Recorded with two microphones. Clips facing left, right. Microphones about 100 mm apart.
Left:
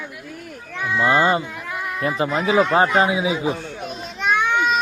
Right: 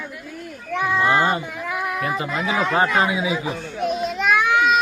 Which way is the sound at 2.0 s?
30° left (ahead or behind).